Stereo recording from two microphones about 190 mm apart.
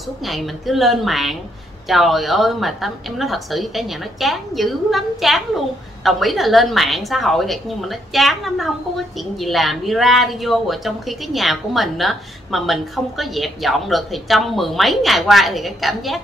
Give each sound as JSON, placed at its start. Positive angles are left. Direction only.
{"t": 0.2, "sound": "a woman's voice", "side_deg": 0}